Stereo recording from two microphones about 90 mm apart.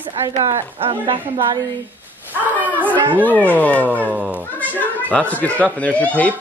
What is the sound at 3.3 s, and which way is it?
Speech, 15° left (ahead or behind).